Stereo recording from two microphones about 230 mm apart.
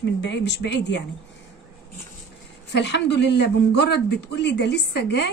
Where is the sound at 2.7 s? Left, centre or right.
Left.